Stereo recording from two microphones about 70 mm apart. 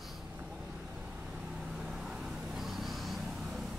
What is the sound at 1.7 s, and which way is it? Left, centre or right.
Vehicle, centre.